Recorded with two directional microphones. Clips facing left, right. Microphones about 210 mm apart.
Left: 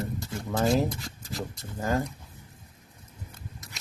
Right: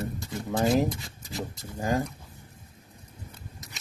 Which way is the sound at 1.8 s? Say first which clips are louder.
Right 1 dB; 15° right (ahead or behind).